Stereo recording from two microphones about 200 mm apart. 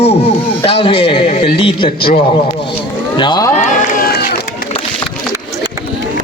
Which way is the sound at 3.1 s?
20° left (ahead or behind).